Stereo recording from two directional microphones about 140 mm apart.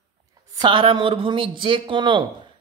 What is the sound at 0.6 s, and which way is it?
Speech, 35° right (ahead or behind).